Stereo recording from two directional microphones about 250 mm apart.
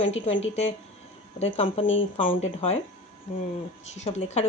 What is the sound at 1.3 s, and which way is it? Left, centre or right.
Speech, left.